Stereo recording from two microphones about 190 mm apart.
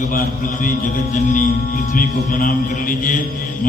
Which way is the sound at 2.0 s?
45° left (ahead or behind).